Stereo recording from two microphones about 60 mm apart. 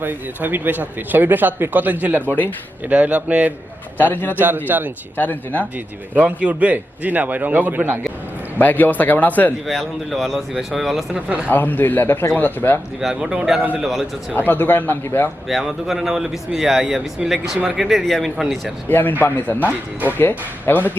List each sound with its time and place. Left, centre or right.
0.0 s a man's voice: right
2.2 s speech: left
2.8 s a man's voice: right
3.9 s speech: left
4.4 s speech: right
5.1 s speech: left
5.7 s a man's voice: right
8.5 s speech: left
9.6 s speech: centre
11.4 s speech: left
13.0 s speech: centre
14.3 s speech: left
15.4 s speech: centre
18.9 s speech: left